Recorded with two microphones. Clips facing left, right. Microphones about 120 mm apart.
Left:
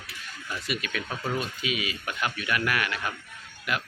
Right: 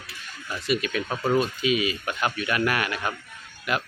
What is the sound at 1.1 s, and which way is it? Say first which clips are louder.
Speech: right 8 dB; 50° right (ahead or behind).